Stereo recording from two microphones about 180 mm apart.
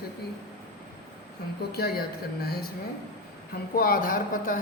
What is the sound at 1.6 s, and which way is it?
Speech, 60° left (ahead or behind).